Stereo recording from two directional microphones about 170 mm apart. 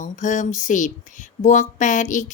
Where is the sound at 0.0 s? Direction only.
45° left (ahead or behind).